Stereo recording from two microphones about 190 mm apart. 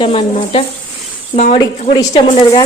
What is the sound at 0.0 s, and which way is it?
Speech, 30° left (ahead or behind).